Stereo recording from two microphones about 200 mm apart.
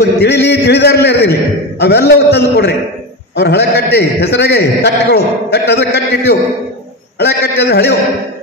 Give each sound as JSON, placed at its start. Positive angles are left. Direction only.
{"t": 0.2, "sound": "a man's voice", "side_deg": 55}